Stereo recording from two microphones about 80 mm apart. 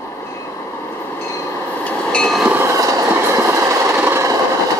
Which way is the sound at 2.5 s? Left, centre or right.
Right.